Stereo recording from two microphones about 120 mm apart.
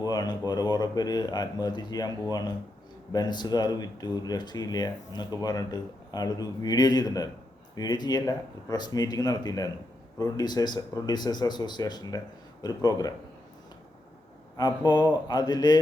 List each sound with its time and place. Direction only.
0.0 s speech: 35° left (ahead or behind)
14.5 s speech: 35° left (ahead or behind)